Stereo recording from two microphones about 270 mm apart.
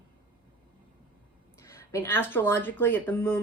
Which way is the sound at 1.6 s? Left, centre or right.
Centre.